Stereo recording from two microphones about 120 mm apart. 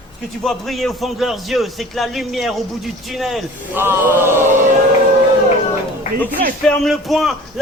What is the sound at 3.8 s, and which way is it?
Chant, 20° right (ahead or behind).